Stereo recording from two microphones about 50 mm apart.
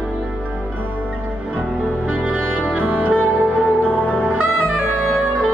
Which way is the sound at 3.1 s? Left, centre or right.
Left.